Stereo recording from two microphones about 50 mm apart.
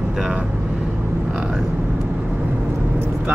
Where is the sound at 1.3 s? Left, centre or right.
Centre.